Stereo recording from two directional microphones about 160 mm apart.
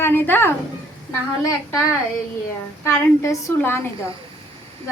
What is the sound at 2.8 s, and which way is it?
Speech, 20° left (ahead or behind).